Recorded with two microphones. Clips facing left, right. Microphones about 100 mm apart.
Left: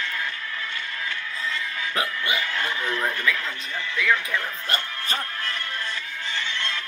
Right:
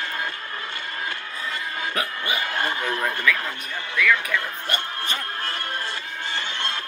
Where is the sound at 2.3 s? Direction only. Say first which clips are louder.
Right 4 dB; 40° right (ahead or behind).